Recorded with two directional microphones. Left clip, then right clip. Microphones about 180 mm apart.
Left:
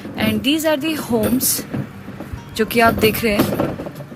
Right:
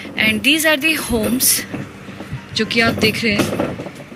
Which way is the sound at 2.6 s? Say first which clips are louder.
Left 1 dB; 50° left (ahead or behind).